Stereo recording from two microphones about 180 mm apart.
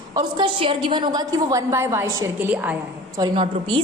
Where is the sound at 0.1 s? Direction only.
25° right (ahead or behind).